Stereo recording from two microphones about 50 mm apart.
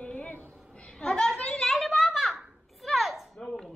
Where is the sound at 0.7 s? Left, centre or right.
Centre.